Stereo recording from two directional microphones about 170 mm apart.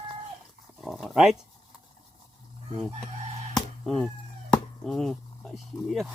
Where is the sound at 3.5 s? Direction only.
Centre (ahead or behind).